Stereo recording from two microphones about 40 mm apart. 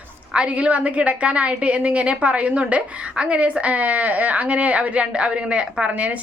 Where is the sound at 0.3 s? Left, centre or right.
Right.